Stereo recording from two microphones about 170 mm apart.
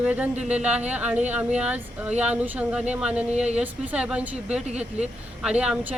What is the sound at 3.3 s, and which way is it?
Speech, 40° right (ahead or behind).